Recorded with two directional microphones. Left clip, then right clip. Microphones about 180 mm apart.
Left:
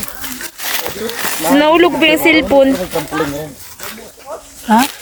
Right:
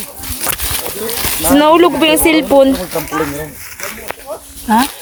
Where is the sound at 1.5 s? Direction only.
20° right (ahead or behind).